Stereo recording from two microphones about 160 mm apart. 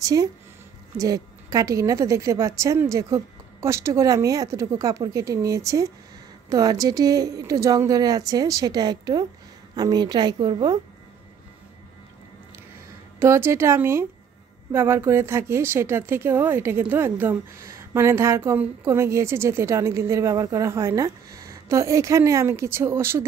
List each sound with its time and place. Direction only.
0.0 s a woman's voice: 20° right (ahead or behind)
13.2 s speech: 15° right (ahead or behind)